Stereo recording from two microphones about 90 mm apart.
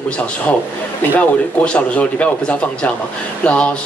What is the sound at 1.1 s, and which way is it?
A man's voice, 15° left (ahead or behind).